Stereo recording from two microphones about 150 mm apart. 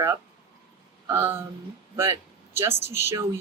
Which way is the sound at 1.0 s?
15° right (ahead or behind).